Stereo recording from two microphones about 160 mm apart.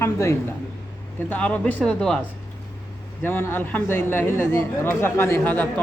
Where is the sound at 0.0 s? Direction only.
20° left (ahead or behind).